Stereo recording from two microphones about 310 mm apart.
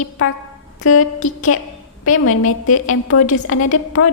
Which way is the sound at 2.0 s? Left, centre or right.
Left.